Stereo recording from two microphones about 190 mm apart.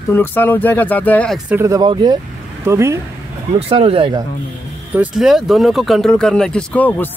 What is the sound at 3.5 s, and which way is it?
Speech, 30° right (ahead or behind).